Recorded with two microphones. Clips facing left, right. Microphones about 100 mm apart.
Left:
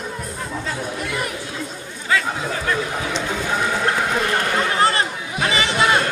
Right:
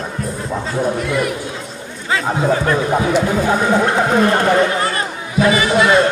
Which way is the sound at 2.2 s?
40° right (ahead or behind).